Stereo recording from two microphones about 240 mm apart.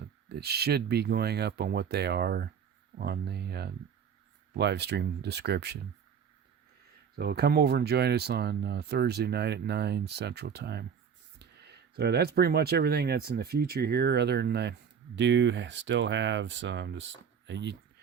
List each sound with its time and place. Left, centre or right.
0.3 s speech: right
7.2 s speech: right